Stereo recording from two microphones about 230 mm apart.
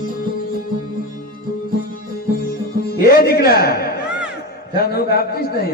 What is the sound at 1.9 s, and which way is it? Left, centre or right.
Music, left.